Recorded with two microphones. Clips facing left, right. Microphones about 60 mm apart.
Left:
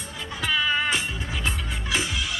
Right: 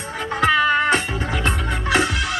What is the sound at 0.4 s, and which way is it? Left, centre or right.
Music, right.